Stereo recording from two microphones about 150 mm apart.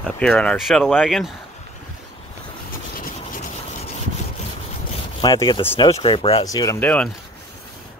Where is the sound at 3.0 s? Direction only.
70° left (ahead or behind).